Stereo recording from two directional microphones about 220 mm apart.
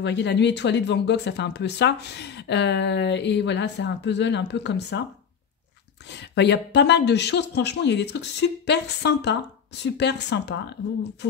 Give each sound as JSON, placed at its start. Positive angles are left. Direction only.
{"t": 0.0, "sound": "speech", "side_deg": 50}
{"t": 6.1, "sound": "speech", "side_deg": 50}